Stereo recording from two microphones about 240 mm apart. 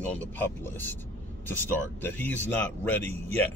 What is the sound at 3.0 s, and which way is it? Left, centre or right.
Speech, right.